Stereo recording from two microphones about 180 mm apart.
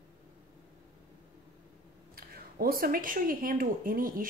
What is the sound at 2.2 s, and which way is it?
Speech, 55° right (ahead or behind).